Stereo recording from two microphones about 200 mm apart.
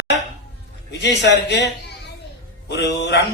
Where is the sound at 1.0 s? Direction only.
60° left (ahead or behind).